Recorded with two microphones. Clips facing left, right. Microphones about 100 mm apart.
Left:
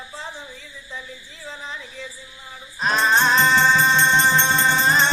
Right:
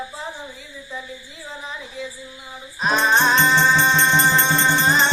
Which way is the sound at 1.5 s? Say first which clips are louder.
Right 1 dB; 5° right (ahead or behind).